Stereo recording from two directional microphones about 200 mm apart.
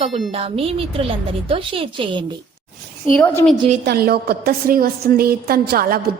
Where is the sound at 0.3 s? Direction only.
30° right (ahead or behind).